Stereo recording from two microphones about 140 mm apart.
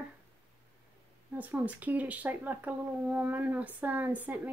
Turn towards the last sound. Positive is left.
turn(degrees=-10)  # may be behind; listen again after turning